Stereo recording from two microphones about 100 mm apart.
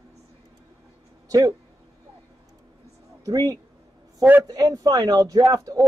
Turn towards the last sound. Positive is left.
turn(degrees=-35)  # may be behind; listen again after turning